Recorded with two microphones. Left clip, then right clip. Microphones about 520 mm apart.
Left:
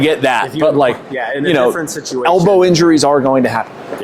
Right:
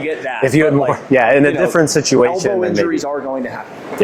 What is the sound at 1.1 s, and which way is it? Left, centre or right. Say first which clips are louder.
Speech: right 4 dB; right.